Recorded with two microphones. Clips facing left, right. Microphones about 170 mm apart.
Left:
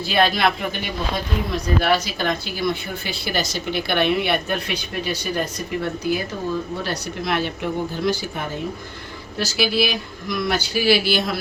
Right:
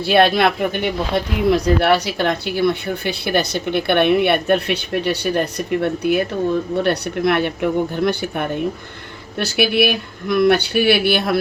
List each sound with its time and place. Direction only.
0.0 s speech: 65° right (ahead or behind)